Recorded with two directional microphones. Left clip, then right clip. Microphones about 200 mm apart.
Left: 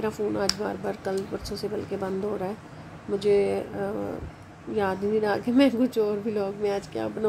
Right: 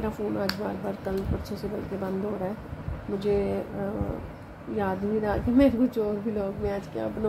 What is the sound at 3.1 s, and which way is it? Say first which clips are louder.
Speech: left 4 dB; 40° left (ahead or behind).